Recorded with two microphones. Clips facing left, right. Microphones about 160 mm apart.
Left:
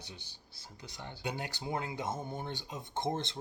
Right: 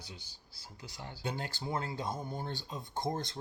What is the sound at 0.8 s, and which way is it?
Speech, 15° left (ahead or behind).